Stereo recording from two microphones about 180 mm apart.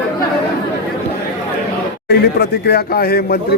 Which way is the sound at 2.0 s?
65° left (ahead or behind).